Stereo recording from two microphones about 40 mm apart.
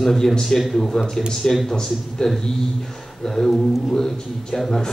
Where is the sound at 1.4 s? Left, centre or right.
Centre.